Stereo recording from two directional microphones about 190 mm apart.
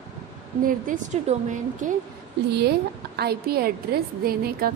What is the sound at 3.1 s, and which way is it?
A woman's voice, 55° right (ahead or behind).